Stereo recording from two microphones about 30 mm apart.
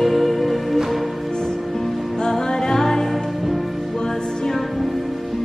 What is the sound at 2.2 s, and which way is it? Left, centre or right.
Music, centre.